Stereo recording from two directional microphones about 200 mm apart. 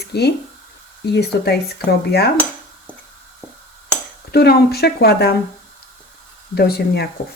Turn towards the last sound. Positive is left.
turn(degrees=50)  # may be behind; listen again after turning